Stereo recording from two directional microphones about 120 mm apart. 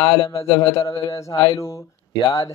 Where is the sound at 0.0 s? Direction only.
35° left (ahead or behind).